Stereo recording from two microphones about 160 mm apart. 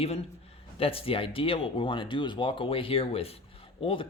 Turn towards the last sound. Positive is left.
turn(degrees=35)  # may be behind; listen again after turning